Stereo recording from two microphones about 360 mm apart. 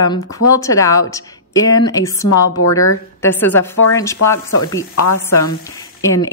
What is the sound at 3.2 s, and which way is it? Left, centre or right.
A woman's voice, centre.